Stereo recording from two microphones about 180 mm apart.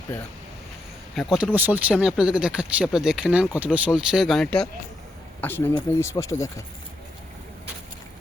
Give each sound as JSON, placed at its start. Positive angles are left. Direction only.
{"t": 1.2, "sound": "speech", "side_deg": 0}